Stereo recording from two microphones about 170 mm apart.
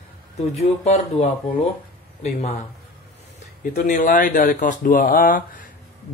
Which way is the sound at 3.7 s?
50° left (ahead or behind).